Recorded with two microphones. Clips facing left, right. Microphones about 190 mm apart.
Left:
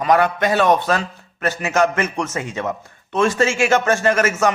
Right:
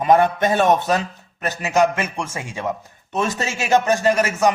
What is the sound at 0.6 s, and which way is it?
Speech, 45° right (ahead or behind).